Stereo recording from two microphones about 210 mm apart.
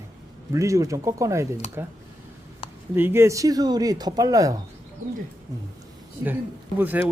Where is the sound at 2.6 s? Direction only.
25° left (ahead or behind).